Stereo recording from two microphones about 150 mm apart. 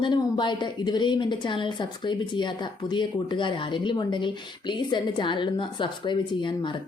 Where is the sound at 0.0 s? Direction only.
30° left (ahead or behind).